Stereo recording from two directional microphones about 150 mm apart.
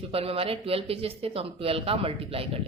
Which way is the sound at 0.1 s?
40° right (ahead or behind).